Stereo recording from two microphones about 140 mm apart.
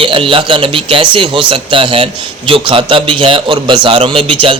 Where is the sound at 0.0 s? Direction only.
40° right (ahead or behind).